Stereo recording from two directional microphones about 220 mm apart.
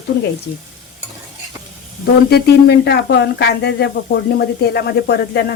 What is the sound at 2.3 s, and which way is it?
Speech, 50° left (ahead or behind).